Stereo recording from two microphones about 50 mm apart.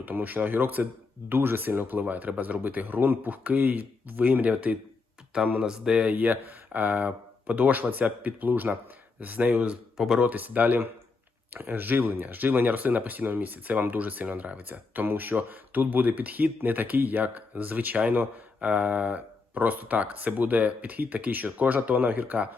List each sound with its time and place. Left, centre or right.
0.0 s speech: right
5.6 s speech: centre
6.1 s speech: right